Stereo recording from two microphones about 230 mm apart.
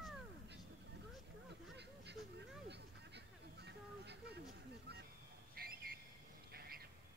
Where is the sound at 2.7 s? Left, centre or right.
Right.